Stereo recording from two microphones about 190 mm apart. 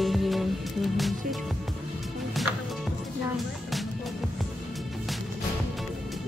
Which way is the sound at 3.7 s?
Centre (ahead or behind).